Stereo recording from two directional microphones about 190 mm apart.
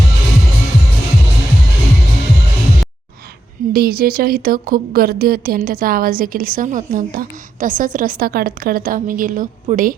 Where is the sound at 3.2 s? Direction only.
55° right (ahead or behind).